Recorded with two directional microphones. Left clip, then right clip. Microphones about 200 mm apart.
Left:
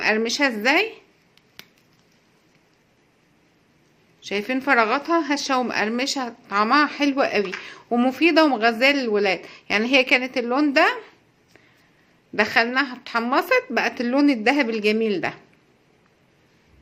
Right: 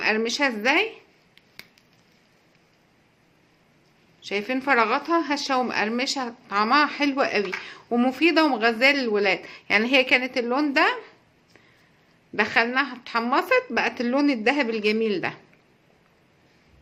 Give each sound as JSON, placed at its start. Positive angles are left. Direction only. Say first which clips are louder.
{"t": 0.0, "sound": "a woman's voice", "louder": "left 2 dB", "side_deg": 15}
{"t": 4.2, "sound": "a woman's voice", "louder": "left 2 dB", "side_deg": 15}
{"t": 12.3, "sound": "a woman's voice", "louder": "left 2 dB", "side_deg": 15}